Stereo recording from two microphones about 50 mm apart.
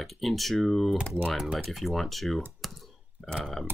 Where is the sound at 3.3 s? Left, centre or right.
Centre.